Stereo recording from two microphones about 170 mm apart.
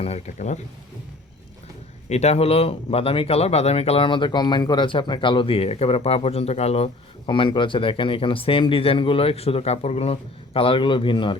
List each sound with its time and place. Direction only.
0.0 s speech: 40° left (ahead or behind)
2.0 s speech: 40° left (ahead or behind)